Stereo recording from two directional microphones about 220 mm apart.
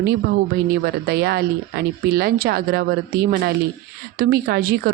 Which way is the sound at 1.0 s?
45° right (ahead or behind).